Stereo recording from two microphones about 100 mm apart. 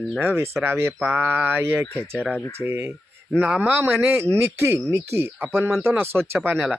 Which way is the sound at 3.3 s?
15° right (ahead or behind).